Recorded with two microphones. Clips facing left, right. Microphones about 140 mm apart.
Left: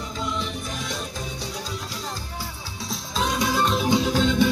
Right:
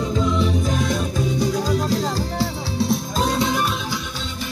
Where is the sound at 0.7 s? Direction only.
55° right (ahead or behind).